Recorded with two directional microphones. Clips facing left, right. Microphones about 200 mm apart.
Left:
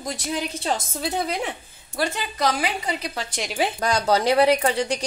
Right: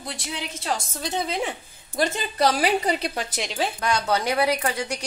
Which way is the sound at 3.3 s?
Centre (ahead or behind).